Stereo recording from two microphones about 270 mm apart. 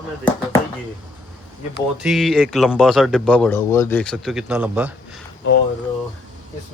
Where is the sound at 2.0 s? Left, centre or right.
Centre.